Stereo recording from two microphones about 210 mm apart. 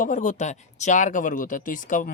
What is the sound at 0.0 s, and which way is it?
Speech, 35° left (ahead or behind).